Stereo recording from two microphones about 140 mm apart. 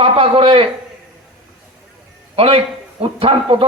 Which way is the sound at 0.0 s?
40° right (ahead or behind).